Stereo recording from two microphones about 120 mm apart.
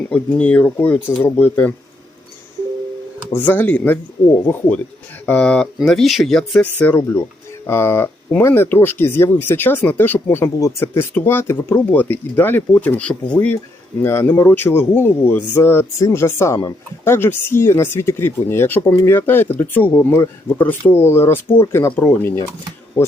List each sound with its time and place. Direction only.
0.1 s speech: 10° left (ahead or behind)
3.3 s speech: 15° left (ahead or behind)
5.2 s speech: 10° left (ahead or behind)